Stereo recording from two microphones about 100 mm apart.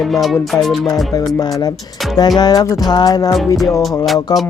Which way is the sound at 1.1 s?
40° left (ahead or behind).